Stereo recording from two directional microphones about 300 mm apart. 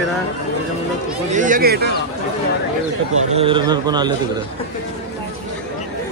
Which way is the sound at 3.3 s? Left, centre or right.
Centre.